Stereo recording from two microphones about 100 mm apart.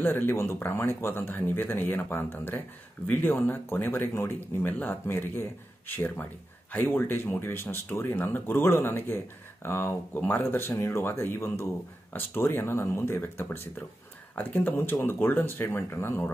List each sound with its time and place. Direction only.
0.0 s speech: 20° left (ahead or behind)